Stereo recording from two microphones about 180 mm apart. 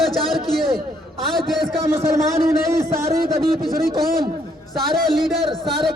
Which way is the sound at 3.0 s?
55° right (ahead or behind).